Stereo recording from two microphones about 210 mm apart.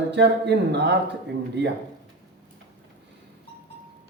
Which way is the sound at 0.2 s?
55° right (ahead or behind).